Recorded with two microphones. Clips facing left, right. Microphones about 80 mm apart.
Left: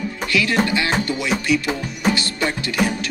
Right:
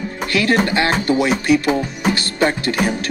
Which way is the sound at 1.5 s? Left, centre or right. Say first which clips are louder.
Right 5 dB; right.